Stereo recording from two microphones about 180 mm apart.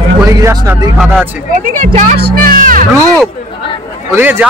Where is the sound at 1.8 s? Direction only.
50° right (ahead or behind).